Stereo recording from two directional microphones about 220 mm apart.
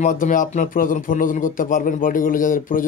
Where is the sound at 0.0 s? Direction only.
35° left (ahead or behind).